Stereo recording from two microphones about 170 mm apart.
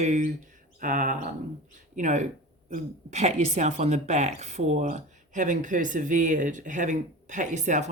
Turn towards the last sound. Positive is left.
turn(degrees=-45)  # may be behind; listen again after turning